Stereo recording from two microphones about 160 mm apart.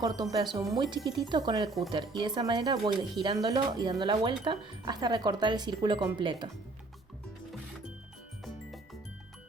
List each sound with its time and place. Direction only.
0.0 s speech: 25° right (ahead or behind)